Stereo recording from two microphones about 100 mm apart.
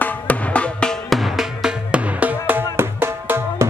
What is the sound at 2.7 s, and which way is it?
Music, 25° right (ahead or behind).